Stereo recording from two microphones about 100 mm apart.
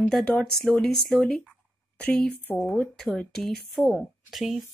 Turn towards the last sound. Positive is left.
turn(degrees=0)  # may be behind; listen again after turning